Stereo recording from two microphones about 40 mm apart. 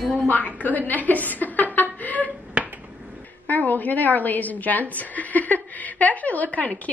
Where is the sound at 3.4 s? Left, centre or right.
Left.